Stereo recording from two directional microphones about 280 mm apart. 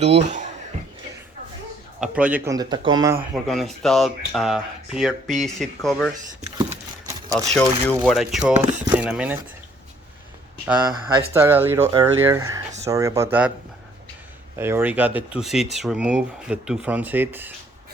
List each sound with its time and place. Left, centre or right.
0.3 s a sound: right
2.0 s speech: centre
3.3 s speech: centre
6.6 s a sound: centre
7.5 s speech: centre
10.8 s speech: centre
14.6 s speech: centre